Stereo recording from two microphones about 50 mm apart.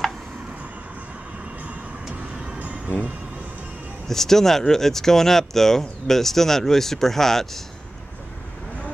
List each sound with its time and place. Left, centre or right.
4.1 s speech: centre